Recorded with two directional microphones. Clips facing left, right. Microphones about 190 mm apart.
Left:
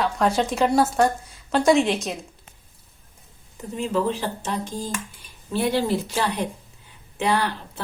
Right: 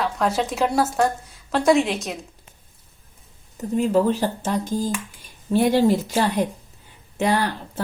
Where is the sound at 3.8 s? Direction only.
40° right (ahead or behind).